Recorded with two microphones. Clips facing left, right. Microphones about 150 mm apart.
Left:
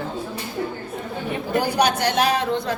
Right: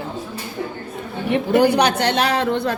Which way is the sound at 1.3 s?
70° right (ahead or behind).